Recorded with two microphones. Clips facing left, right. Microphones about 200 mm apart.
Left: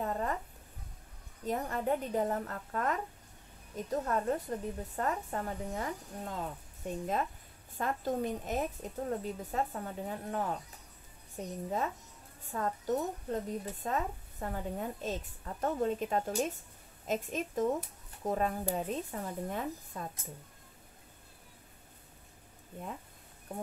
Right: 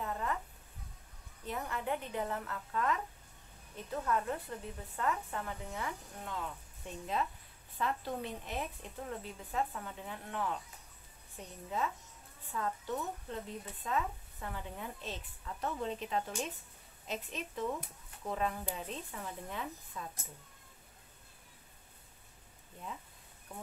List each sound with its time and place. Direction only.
0.0 s a sound: 40° left (ahead or behind)
1.4 s a woman's voice: 40° left (ahead or behind)
23.5 s speech: 40° left (ahead or behind)